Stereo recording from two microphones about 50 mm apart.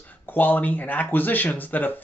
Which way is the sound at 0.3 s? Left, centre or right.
Left.